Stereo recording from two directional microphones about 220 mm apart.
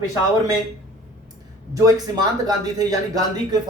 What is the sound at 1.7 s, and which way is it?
Speech, 15° right (ahead or behind).